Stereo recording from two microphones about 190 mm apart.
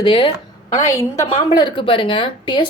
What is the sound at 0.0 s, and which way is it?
Speech, 30° left (ahead or behind).